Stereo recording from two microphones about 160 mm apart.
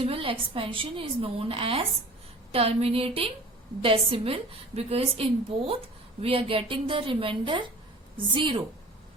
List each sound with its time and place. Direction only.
0.0 s a woman's voice: 35° right (ahead or behind)